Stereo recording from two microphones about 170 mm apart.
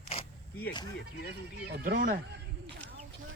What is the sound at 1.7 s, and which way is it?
Speech, 60° right (ahead or behind).